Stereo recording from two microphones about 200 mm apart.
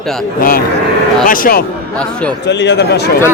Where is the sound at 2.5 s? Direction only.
60° left (ahead or behind).